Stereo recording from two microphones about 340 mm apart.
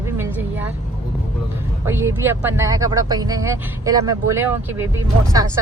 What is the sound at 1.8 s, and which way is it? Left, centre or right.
Speech, centre.